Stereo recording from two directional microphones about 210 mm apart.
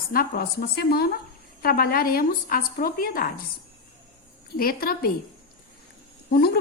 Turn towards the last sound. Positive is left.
turn(degrees=50)  # may be behind; listen again after turning